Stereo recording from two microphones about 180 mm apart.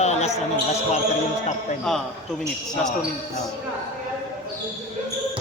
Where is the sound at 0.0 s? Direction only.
40° left (ahead or behind).